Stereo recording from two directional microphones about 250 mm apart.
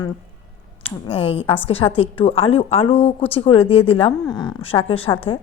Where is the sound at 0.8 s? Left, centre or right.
Left.